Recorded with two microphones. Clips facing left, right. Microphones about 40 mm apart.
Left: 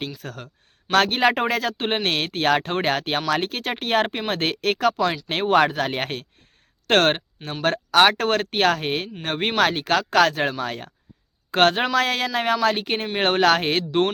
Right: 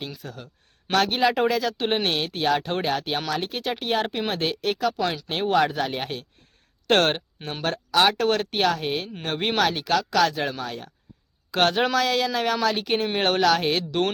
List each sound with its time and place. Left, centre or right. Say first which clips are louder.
0.2 s speech: left 3 dB; left
13.4 s speech: left 3 dB; left
13.7 s speech: left 2 dB; left